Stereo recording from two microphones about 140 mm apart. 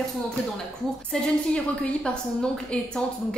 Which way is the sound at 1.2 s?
5° left (ahead or behind).